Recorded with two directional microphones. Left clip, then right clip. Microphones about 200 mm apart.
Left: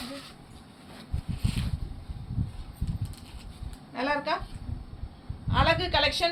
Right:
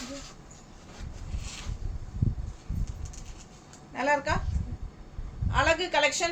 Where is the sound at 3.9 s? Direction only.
15° right (ahead or behind).